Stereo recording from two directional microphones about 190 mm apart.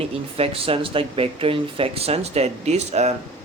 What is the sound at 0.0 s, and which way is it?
Speech, 30° right (ahead or behind).